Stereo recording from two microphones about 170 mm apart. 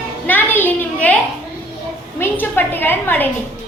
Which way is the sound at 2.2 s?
10° left (ahead or behind).